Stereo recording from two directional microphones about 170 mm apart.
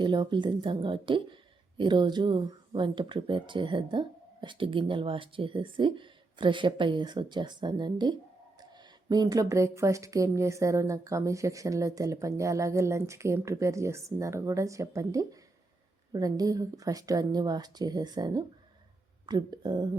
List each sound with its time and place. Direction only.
0.0 s speech: 25° right (ahead or behind)